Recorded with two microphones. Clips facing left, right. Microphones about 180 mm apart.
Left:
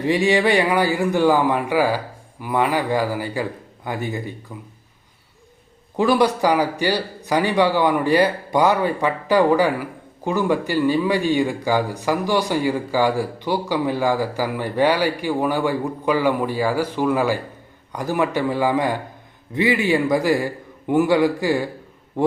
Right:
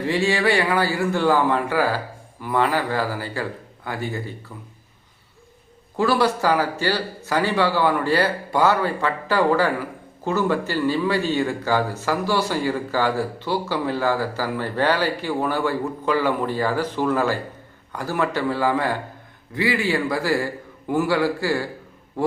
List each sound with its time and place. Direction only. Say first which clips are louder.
0.0 s a man's voice: left 3 dB; 15° left (ahead or behind)
6.0 s a man's voice: left 3 dB; 15° left (ahead or behind)